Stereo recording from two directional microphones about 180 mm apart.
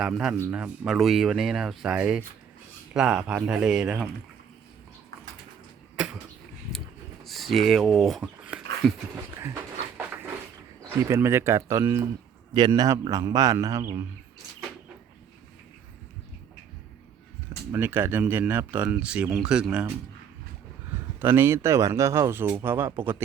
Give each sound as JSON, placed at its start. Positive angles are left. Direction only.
{"t": 0.0, "sound": "speech", "side_deg": -5}
{"t": 7.3, "sound": "a sound", "side_deg": 0}
{"t": 10.8, "sound": "a man's voice", "side_deg": -15}
{"t": 17.7, "sound": "speech", "side_deg": -10}
{"t": 21.2, "sound": "speech", "side_deg": -15}